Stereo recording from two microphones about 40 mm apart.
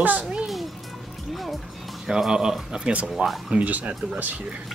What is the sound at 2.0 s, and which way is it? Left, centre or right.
Speech, centre.